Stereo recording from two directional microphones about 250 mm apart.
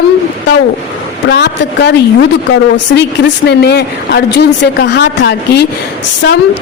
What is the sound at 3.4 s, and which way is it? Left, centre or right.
A woman's voice, left.